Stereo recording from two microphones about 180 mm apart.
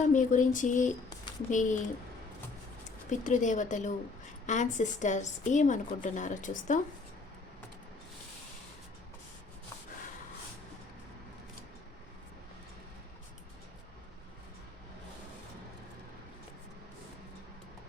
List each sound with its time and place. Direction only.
0.0 s a woman's voice: 45° left (ahead or behind)
3.1 s a woman's voice: 45° left (ahead or behind)